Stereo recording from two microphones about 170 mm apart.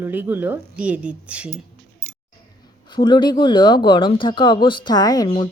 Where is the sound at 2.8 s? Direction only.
25° left (ahead or behind).